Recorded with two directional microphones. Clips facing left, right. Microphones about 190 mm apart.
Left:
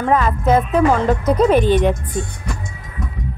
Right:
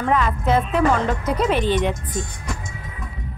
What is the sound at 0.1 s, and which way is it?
A woman's voice, 40° left (ahead or behind).